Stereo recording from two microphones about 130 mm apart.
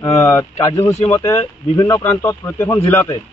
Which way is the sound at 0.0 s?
25° left (ahead or behind).